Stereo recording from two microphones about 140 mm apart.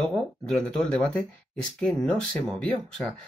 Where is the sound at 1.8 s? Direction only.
5° left (ahead or behind).